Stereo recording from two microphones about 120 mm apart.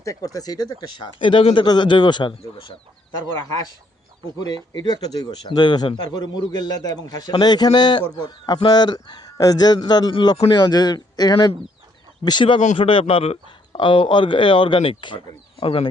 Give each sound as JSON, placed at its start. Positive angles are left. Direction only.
{"t": 0.0, "sound": "speech", "side_deg": 30}
{"t": 4.4, "sound": "speech", "side_deg": 35}